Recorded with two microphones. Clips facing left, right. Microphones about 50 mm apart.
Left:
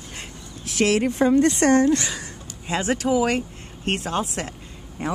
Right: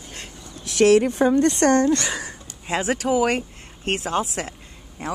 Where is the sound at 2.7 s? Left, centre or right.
Centre.